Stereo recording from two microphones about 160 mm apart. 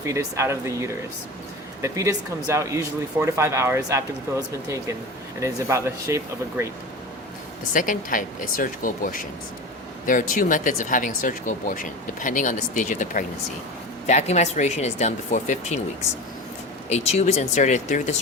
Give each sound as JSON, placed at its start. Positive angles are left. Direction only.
{"t": 0.0, "sound": "speech", "side_deg": -20}
{"t": 5.4, "sound": "speech", "side_deg": -20}
{"t": 7.7, "sound": "speech", "side_deg": 55}
{"t": 16.9, "sound": "speech", "side_deg": 45}